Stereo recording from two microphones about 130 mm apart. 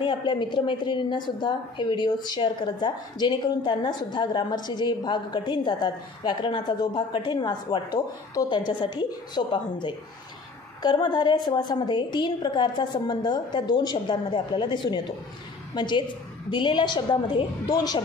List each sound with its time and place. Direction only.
0.0 s a woman's voice: 35° left (ahead or behind)